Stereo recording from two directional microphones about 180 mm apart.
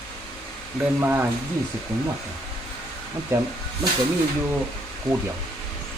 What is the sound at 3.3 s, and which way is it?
Speech, 15° right (ahead or behind).